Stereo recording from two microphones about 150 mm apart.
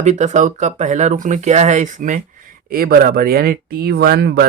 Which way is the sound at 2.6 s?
75° right (ahead or behind).